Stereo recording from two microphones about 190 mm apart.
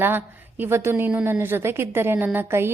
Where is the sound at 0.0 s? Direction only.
10° right (ahead or behind).